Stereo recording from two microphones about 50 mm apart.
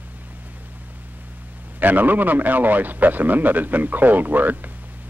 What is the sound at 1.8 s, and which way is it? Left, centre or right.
Speech, right.